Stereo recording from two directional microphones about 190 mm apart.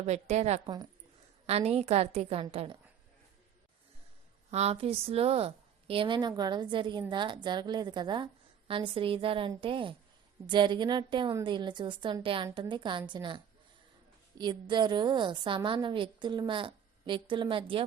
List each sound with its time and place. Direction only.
0.0 s a woman's voice: 35° right (ahead or behind)
4.5 s a woman's voice: 35° right (ahead or behind)